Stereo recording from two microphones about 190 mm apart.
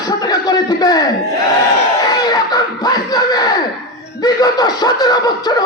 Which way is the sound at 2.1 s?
20° left (ahead or behind).